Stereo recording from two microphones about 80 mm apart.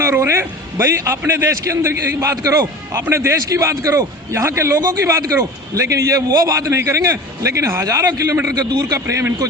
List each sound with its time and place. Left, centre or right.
0.0 s a man's voice: right
2.3 s a man's voice: right